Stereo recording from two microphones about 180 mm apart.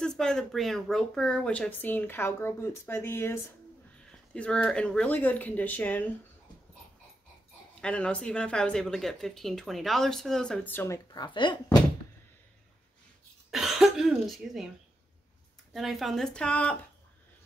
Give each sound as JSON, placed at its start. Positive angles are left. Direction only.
{"t": 0.0, "sound": "speech", "side_deg": 5}
{"t": 7.8, "sound": "speech", "side_deg": 5}
{"t": 11.1, "sound": "speech", "side_deg": 25}
{"t": 13.5, "sound": "cough", "side_deg": 0}
{"t": 15.7, "sound": "speech", "side_deg": 0}